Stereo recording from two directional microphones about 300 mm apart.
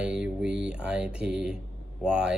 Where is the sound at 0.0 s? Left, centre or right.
Centre.